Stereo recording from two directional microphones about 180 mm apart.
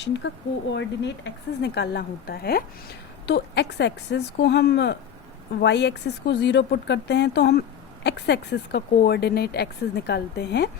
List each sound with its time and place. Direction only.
0.0 s a woman's voice: 80° left; by 2.6 s 60° left (ahead or behind)
3.2 s a woman's voice: 75° left (ahead or behind)